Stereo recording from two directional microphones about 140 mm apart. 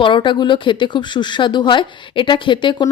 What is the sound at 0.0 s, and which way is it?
Speech, 35° left (ahead or behind).